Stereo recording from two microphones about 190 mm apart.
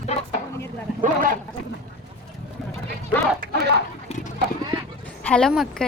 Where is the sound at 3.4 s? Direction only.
55° right (ahead or behind).